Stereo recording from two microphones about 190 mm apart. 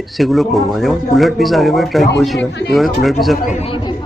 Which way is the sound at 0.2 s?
Centre (ahead or behind).